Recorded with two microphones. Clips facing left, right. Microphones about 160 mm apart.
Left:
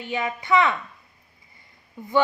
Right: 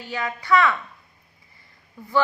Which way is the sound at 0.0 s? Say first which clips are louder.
Left 2 dB; 20° left (ahead or behind).